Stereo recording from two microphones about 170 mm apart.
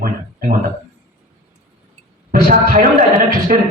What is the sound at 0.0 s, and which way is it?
Speech, 60° right (ahead or behind).